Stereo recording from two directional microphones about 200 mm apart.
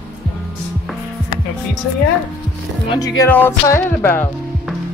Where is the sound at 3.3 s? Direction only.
10° left (ahead or behind).